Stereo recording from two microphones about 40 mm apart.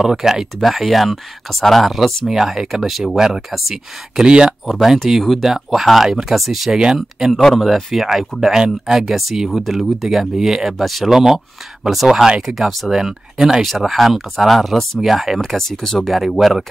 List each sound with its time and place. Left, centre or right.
0.0 s speech: centre
3.2 s speech: centre
4.6 s speech: centre
5.4 s speech: centre
9.5 s speech: centre
15.5 s speech: centre
16.1 s speech: centre